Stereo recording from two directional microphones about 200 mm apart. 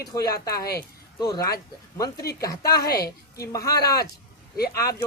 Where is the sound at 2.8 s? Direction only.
50° left (ahead or behind).